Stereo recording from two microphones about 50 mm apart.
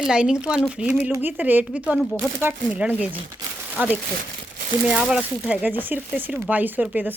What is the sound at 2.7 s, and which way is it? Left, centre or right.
Speech, right.